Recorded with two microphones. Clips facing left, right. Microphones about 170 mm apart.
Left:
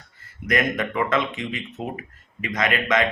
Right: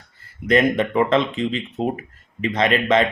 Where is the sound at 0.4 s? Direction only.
30° right (ahead or behind).